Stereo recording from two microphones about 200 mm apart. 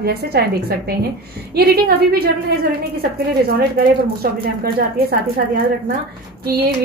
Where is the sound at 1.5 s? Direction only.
50° right (ahead or behind).